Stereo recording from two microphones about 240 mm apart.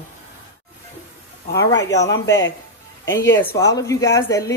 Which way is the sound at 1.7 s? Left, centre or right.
Left.